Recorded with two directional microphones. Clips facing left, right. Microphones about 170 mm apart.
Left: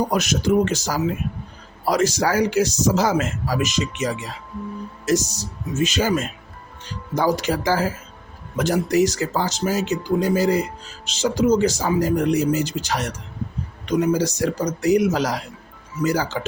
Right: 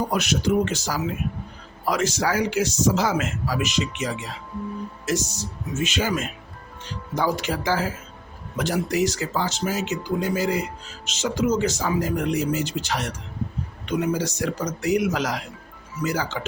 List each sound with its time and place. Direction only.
0.1 s speech: 45° left (ahead or behind)